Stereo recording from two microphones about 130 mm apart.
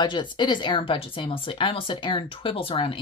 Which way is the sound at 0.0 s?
35° left (ahead or behind).